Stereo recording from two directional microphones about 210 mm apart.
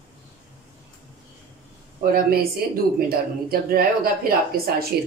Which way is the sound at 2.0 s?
45° right (ahead or behind).